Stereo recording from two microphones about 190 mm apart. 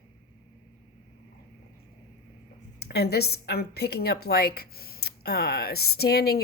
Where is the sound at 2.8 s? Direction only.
60° left (ahead or behind).